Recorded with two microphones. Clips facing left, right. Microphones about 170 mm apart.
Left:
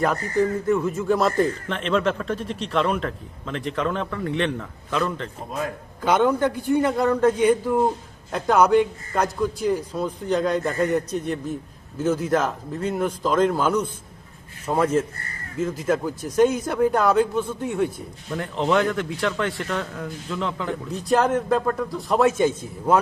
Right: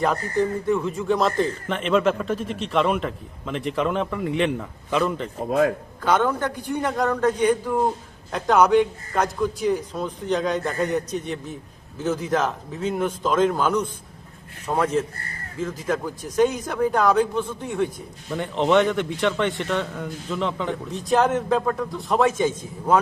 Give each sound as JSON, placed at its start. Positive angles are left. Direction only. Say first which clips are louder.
{"t": 0.3, "sound": "a man's voice", "louder": "left 3 dB", "side_deg": 5}
{"t": 5.5, "sound": "a man's voice", "louder": "right 10 dB", "side_deg": -70}
{"t": 6.0, "sound": "a man's voice", "louder": "left 2 dB", "side_deg": 15}